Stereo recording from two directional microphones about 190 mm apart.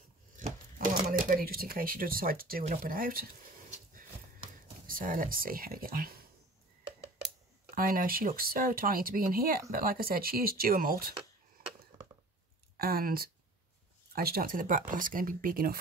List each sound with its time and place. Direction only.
0.4 s speech: 45° right (ahead or behind)
4.8 s speech: 45° right (ahead or behind)
7.7 s speech: 50° right (ahead or behind)
12.7 s speech: 50° right (ahead or behind)